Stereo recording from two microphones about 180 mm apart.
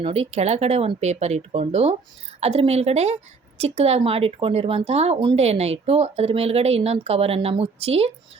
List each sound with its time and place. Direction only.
0.0 s speech: 35° right (ahead or behind)